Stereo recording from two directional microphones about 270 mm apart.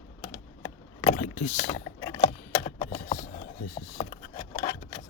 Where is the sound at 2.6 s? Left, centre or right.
Left.